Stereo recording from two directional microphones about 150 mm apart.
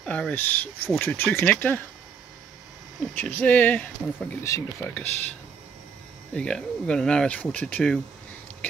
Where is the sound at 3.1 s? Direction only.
15° left (ahead or behind).